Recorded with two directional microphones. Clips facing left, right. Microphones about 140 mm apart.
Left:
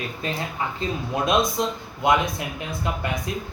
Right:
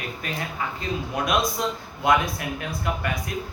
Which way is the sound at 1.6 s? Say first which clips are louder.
Left 2 dB; 20° left (ahead or behind).